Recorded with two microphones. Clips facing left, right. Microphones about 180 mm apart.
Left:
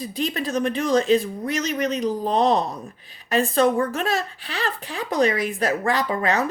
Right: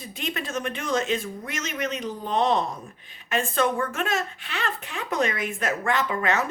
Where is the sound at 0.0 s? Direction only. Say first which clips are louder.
Left 6 dB; 35° left (ahead or behind).